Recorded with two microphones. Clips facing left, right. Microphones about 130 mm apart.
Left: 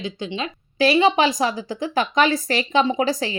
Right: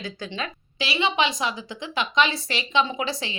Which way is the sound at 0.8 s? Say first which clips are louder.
Left 8 dB; 45° left (ahead or behind).